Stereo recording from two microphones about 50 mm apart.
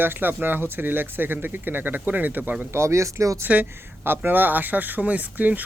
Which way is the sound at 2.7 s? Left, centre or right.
Right.